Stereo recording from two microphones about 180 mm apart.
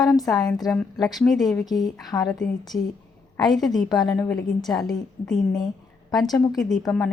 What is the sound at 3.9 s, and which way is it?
Speech, 25° left (ahead or behind).